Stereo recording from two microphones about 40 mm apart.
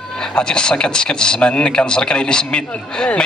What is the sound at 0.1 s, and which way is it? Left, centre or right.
Speech, centre.